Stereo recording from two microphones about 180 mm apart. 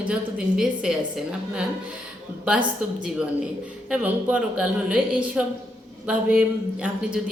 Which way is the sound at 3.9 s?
10° right (ahead or behind).